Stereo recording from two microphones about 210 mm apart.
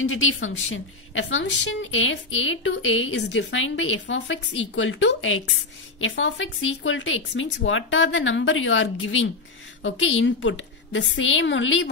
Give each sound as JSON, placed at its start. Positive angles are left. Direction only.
{"t": 0.0, "sound": "a woman's voice", "side_deg": 70}